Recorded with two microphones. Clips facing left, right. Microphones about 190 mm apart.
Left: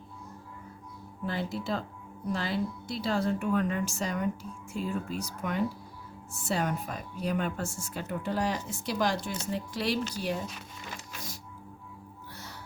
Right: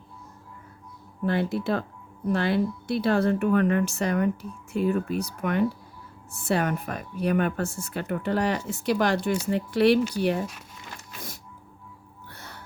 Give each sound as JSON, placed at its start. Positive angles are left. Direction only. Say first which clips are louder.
{"t": 1.2, "sound": "speech", "louder": "right 8 dB", "side_deg": -60}
{"t": 12.3, "sound": "music", "louder": "right 2 dB", "side_deg": -55}